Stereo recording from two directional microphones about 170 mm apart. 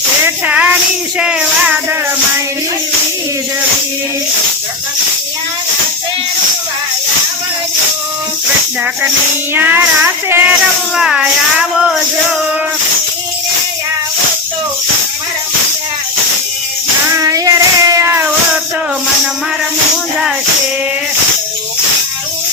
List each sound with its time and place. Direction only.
0.3 s child singing: 10° right (ahead or behind)
1.2 s music: 5° right (ahead or behind)
9.6 s child singing: 10° right (ahead or behind)
10.9 s a sound: 5° right (ahead or behind)
17.2 s child singing: 20° right (ahead or behind)